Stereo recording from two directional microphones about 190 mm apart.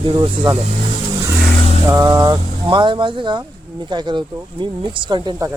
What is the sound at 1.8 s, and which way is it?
Speech, 20° right (ahead or behind).